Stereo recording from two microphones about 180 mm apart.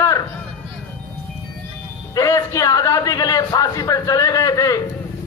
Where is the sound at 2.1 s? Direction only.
15° left (ahead or behind).